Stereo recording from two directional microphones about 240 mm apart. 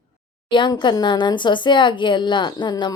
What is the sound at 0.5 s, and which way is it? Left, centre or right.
Speech, centre.